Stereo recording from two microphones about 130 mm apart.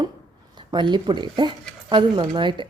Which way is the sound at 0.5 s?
35° right (ahead or behind).